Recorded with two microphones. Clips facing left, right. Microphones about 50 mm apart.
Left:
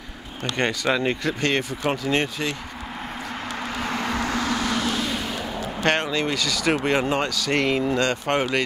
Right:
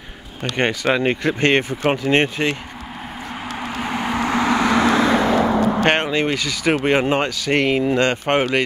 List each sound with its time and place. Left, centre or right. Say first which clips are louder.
0.4 s speech: right 4 dB; right
3.6 s vehicle: right 4 dB; centre; by 4.8 s right
5.1 s vehicle: right 12 dB; right
5.9 s speech: right 4 dB; right